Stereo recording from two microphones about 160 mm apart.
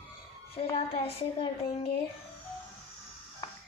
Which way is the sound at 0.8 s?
40° left (ahead or behind).